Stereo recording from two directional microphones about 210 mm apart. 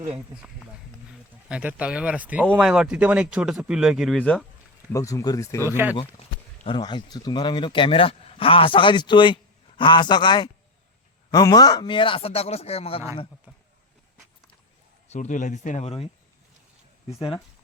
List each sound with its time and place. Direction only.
1.5 s speech: 5° right (ahead or behind)
4.9 s speech: 15° left (ahead or behind)
5.6 s speech: 10° right (ahead or behind)
6.7 s speech: 20° left (ahead or behind)
15.1 s speech: 35° left (ahead or behind)